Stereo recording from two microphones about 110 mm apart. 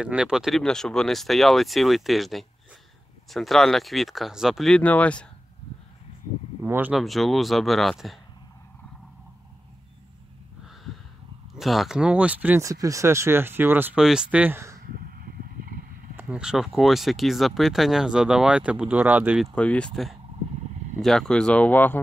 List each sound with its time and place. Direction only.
0.0 s speech: 10° right (ahead or behind)
4.7 s speech: 15° left (ahead or behind)
6.6 s speech: 20° right (ahead or behind)
6.9 s speech: centre (ahead or behind)
11.5 s speech: centre (ahead or behind)
12.6 s speech: 30° right (ahead or behind)
13.9 s speech: 5° right (ahead or behind)
16.2 s speech: 10° right (ahead or behind)
19.4 s speech: 10° left (ahead or behind)